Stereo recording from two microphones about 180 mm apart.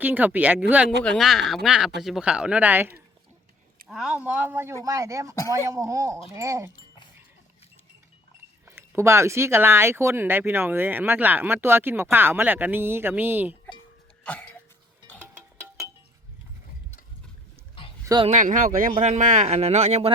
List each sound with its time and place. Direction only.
0.0 s speech: 10° right (ahead or behind)
1.0 s speech: centre (ahead or behind); by 6.7 s 15° right (ahead or behind)
8.6 s speech: 10° right (ahead or behind)
14.3 s cough: 10° left (ahead or behind)
15.2 s music: 10° right (ahead or behind)
18.0 s a sound: 20° right (ahead or behind)
18.3 s speech: 45° right (ahead or behind)